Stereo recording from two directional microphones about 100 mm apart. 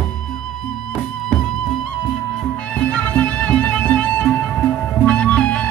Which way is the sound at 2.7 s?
15° left (ahead or behind).